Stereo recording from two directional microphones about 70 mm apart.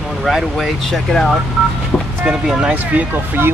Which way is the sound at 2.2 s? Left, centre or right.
Centre.